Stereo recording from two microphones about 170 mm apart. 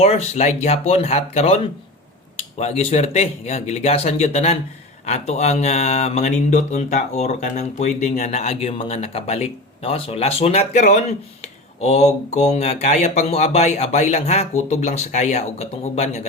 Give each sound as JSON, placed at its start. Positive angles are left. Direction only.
{"t": 0.0, "sound": "mantra", "side_deg": 40}